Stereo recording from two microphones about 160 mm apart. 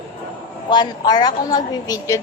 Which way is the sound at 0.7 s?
25° left (ahead or behind).